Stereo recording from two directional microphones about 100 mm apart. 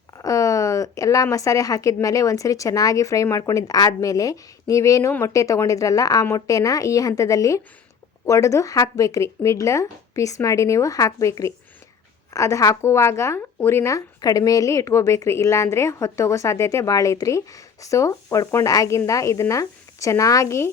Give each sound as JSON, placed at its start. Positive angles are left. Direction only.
{"t": 0.2, "sound": "speech", "side_deg": 35}